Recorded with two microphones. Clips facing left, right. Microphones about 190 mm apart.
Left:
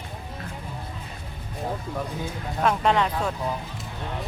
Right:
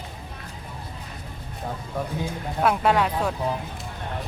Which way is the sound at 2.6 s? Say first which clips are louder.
Right 1 dB; 5° right (ahead or behind).